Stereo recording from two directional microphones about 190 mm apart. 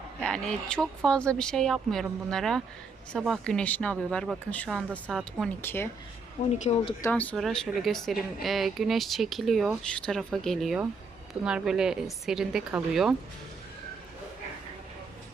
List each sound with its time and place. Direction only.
0.2 s speech: 5° left (ahead or behind)
6.5 s speech: 35° left (ahead or behind)
7.0 s speech: 10° left (ahead or behind)